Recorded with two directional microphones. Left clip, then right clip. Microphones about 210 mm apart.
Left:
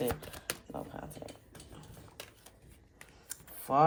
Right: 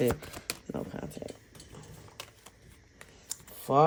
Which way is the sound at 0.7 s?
45° right (ahead or behind).